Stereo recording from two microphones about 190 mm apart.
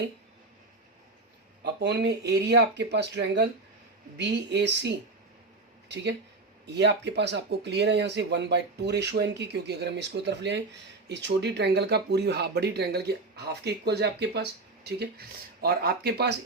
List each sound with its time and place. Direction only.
1.6 s speech: 65° right (ahead or behind)
6.7 s speech: 65° right (ahead or behind)